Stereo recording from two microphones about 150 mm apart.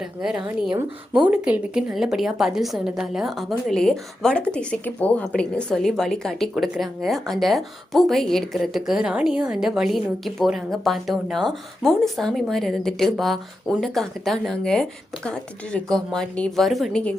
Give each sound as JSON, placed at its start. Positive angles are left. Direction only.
{"t": 0.0, "sound": "a woman's voice", "side_deg": -5}
{"t": 0.7, "sound": "speech", "side_deg": -30}
{"t": 1.3, "sound": "a woman's voice", "side_deg": -10}